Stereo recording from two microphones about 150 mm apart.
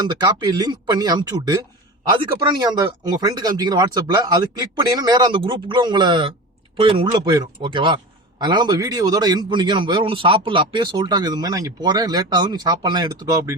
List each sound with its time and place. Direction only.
0.0 s a man's voice: 30° right (ahead or behind)